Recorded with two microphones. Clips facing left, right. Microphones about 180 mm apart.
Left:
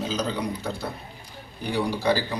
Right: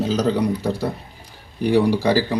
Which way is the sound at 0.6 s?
40° right (ahead or behind).